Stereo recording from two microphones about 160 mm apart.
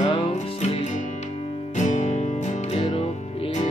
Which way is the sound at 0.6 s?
45° left (ahead or behind).